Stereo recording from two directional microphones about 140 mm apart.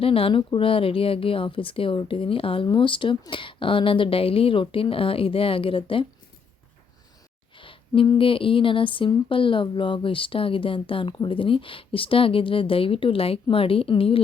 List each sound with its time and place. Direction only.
0.0 s speech: 40° left (ahead or behind)
7.6 s speech: 40° left (ahead or behind)